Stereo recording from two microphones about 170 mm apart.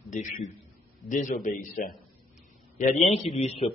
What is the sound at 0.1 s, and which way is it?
A man's voice, 45° left (ahead or behind).